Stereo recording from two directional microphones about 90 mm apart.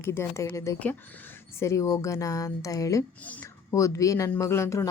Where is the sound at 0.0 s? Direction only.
30° left (ahead or behind).